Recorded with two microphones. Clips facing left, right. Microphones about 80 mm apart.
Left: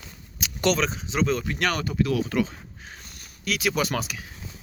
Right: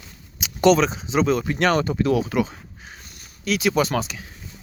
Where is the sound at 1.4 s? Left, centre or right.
Right.